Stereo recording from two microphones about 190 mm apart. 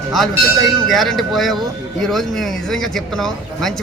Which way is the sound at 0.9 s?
Centre (ahead or behind).